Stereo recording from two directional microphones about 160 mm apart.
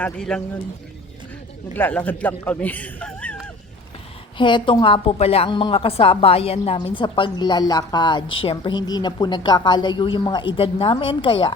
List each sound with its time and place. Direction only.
0.0 s speech: 5° left (ahead or behind)
1.7 s speech: 10° left (ahead or behind)
4.4 s a woman's voice: 30° left (ahead or behind)